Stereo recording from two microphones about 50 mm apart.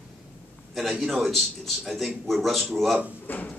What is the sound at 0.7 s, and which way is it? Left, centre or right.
A man's voice, centre.